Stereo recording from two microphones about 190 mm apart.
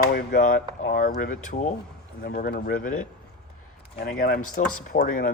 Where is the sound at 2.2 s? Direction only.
55° left (ahead or behind).